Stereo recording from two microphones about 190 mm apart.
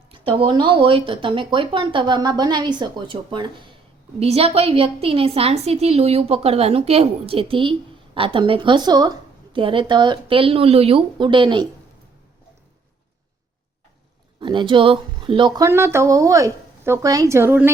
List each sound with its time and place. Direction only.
0.1 s a woman's voice: 30° right (ahead or behind)
14.3 s speech: 25° right (ahead or behind)